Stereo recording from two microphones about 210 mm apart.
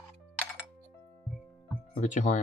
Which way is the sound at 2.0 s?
35° left (ahead or behind).